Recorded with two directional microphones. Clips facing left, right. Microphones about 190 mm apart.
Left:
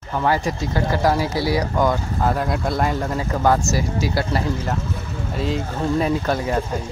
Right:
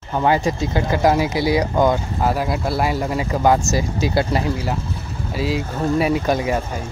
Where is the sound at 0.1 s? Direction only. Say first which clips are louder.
Right 3 dB; 20° right (ahead or behind).